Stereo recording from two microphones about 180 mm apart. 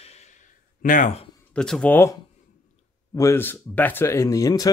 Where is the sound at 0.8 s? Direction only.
45° left (ahead or behind).